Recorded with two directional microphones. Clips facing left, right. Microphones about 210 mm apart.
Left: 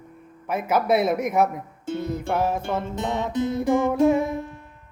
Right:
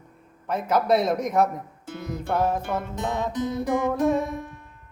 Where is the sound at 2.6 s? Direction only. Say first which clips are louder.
Left 2 dB; 25° left (ahead or behind).